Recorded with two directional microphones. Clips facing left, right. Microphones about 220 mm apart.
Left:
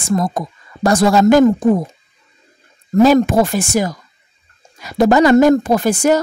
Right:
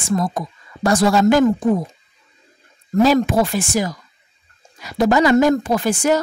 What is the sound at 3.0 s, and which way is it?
A woman's voice, 50° left (ahead or behind).